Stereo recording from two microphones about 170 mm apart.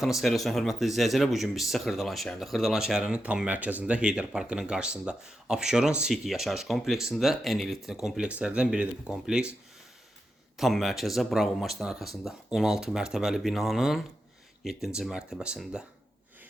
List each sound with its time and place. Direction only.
0.0 s speech: centre (ahead or behind)
10.6 s speech: centre (ahead or behind)